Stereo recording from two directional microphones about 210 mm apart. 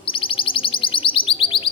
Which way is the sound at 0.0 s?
25° left (ahead or behind).